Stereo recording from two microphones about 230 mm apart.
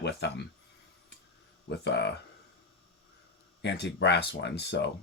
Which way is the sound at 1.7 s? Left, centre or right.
Left.